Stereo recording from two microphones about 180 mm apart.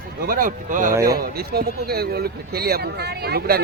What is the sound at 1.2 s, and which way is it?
Speech, 60° right (ahead or behind).